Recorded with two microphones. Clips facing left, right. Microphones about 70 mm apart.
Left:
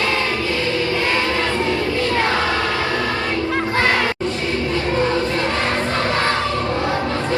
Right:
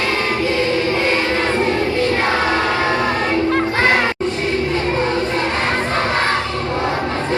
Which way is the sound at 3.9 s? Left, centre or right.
Right.